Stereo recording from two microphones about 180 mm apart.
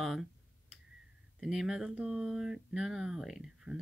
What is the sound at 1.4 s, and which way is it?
Speech, centre (ahead or behind).